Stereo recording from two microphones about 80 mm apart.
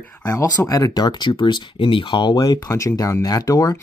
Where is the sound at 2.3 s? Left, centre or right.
Left.